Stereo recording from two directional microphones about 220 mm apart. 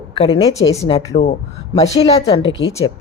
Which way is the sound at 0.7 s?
15° left (ahead or behind).